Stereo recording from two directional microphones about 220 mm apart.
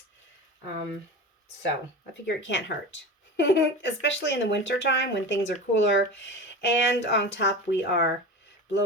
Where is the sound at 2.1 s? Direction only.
55° left (ahead or behind).